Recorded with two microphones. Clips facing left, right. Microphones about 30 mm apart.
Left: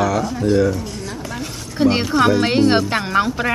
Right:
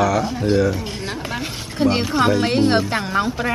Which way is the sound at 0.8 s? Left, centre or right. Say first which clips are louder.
Right 1 dB; right.